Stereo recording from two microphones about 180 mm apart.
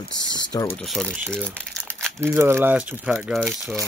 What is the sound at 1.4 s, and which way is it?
Crumpling, 10° right (ahead or behind).